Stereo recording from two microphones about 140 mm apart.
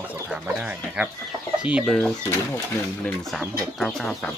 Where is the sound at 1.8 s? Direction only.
5° left (ahead or behind).